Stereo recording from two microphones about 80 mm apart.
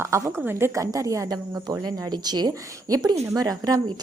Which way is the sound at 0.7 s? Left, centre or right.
Right.